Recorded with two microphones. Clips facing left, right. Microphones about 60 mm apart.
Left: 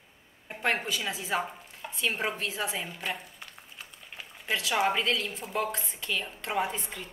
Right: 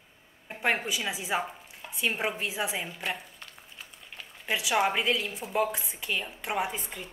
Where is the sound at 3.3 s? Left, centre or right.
Centre.